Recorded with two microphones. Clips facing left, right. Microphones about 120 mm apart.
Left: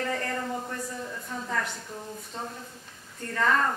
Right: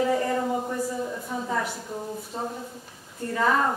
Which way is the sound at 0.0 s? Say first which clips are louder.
Right 7 dB; 10° right (ahead or behind).